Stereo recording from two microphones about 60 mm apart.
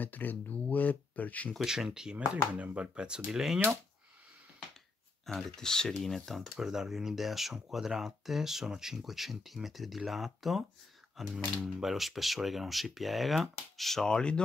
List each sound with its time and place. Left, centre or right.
0.0 s speech: left
1.6 s speech: centre
5.2 s speech: centre